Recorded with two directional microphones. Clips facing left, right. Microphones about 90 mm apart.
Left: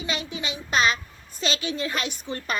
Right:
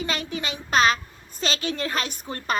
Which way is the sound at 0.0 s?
50° right (ahead or behind).